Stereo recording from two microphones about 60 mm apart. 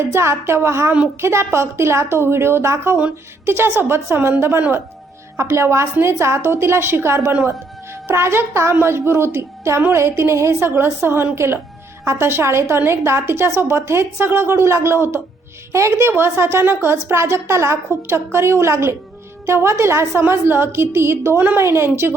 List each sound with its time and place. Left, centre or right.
0.0 s a woman's voice: right